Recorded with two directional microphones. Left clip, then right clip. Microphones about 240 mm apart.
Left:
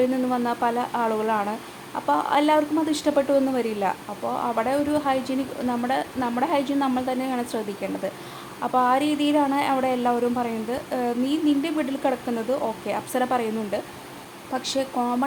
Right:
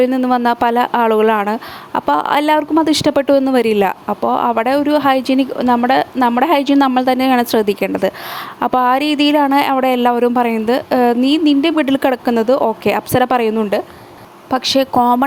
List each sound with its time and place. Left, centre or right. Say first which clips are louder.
0.0 s a woman's voice: right 10 dB; right